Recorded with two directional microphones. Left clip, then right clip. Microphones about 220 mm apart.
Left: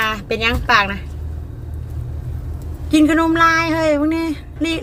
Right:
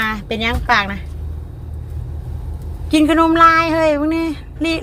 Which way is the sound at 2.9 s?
20° right (ahead or behind).